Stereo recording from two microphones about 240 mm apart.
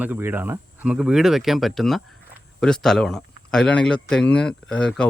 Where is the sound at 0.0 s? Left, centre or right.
Centre.